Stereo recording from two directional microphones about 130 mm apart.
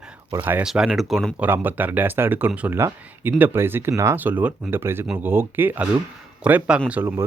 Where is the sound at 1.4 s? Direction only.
15° right (ahead or behind).